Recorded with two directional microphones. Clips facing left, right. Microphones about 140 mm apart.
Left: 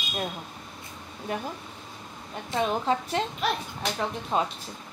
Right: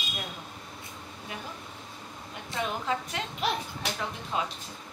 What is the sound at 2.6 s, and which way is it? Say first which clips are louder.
Speech: left 5 dB; 35° left (ahead or behind).